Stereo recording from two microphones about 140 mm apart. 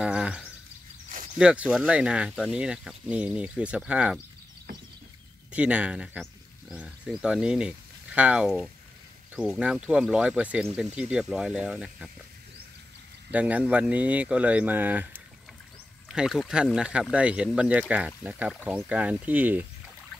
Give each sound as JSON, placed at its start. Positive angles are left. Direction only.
{"t": 0.0, "sound": "a sound", "side_deg": -5}
{"t": 1.0, "sound": "a sound", "side_deg": -70}
{"t": 1.4, "sound": "speech", "side_deg": -5}
{"t": 5.5, "sound": "speech", "side_deg": -10}
{"t": 13.3, "sound": "speech", "side_deg": -10}
{"t": 16.1, "sound": "speech", "side_deg": 0}